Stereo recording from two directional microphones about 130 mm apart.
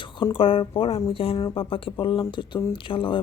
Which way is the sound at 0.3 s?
45° left (ahead or behind).